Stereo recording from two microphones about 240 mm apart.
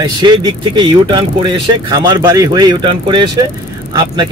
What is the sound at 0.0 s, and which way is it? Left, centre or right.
A man's voice, centre.